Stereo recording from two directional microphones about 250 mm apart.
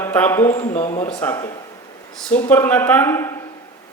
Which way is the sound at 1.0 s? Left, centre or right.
Centre.